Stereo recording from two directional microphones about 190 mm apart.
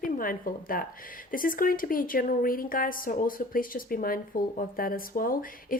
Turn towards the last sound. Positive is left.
turn(degrees=50)  # may be behind; listen again after turning